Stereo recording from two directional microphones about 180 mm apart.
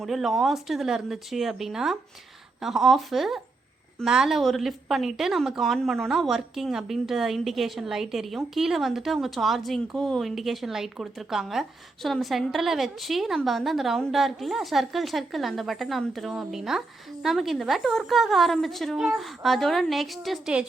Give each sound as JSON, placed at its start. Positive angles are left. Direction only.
{"t": 0.0, "sound": "a woman's voice", "side_deg": 0}